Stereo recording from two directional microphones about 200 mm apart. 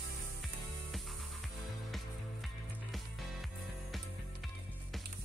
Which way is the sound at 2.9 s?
Centre (ahead or behind).